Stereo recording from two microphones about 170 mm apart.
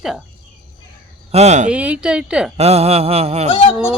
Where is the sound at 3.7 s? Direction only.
5° right (ahead or behind).